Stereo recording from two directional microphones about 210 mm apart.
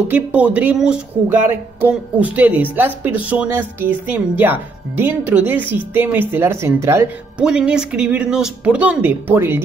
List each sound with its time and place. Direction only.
0.1 s speech: 5° right (ahead or behind)